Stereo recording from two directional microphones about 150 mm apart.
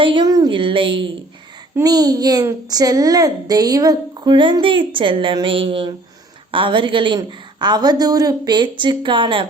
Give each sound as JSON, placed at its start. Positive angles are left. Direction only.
{"t": 0.0, "sound": "a woman's voice", "side_deg": -30}